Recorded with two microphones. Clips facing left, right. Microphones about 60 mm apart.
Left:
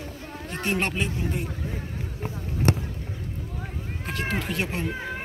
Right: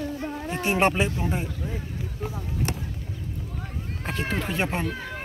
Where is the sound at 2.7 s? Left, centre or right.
Left.